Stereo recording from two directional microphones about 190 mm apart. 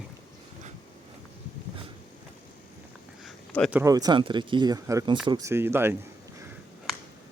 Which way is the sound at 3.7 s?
15° right (ahead or behind).